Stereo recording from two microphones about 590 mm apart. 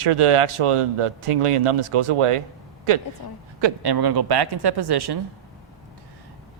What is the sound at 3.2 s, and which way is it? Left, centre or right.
Speech, left.